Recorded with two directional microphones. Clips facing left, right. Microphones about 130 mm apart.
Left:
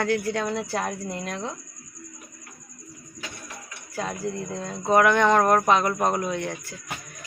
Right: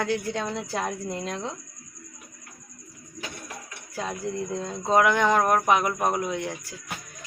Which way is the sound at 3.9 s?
5° right (ahead or behind).